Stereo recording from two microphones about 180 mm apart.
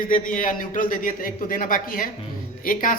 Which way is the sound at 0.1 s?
50° left (ahead or behind).